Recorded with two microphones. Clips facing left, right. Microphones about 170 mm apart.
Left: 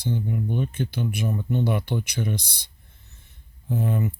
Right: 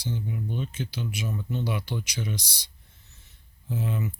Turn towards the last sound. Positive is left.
turn(degrees=50)  # may be behind; listen again after turning